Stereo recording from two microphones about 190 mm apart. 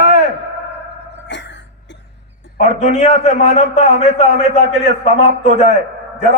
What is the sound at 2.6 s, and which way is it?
A man's voice, 35° left (ahead or behind).